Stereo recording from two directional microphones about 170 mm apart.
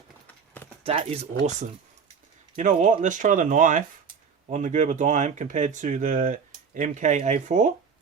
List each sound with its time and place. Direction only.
0.9 s speech: 40° right (ahead or behind)